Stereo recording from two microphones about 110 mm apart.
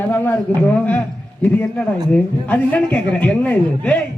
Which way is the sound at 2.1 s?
15° left (ahead or behind).